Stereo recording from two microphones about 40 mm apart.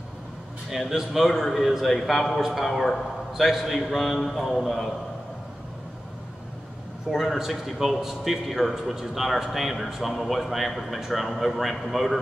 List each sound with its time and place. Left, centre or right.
0.9 s a man's voice: centre
7.1 s a man's voice: centre